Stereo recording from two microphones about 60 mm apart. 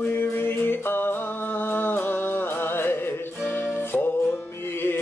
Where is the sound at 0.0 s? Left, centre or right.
Left.